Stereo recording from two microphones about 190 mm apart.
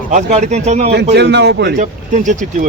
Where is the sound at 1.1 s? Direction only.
65° right (ahead or behind).